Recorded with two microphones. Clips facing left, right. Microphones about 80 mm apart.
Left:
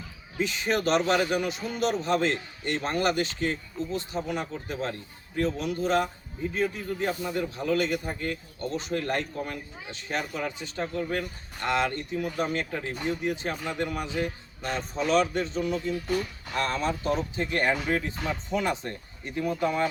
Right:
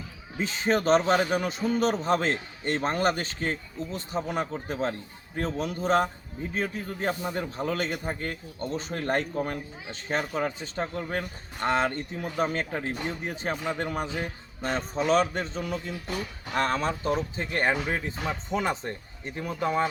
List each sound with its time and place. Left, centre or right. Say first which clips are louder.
0.3 s a man's voice: right 1 dB; right